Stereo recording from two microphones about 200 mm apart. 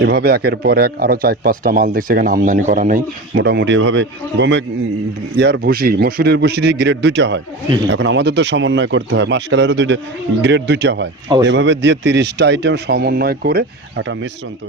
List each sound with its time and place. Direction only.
0.0 s speech: 50° right (ahead or behind)
3.4 s a man's voice: 60° right (ahead or behind)